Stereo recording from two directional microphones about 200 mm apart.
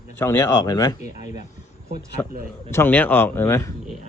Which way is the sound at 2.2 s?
10° left (ahead or behind).